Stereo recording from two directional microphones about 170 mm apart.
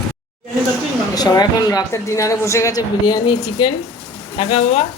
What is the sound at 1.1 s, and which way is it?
Speech, 20° left (ahead or behind).